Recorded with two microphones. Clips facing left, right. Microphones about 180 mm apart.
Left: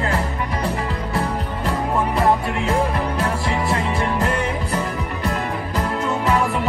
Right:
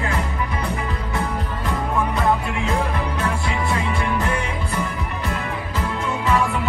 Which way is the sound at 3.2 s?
35° left (ahead or behind).